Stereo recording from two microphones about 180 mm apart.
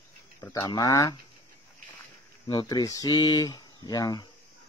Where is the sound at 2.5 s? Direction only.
25° left (ahead or behind).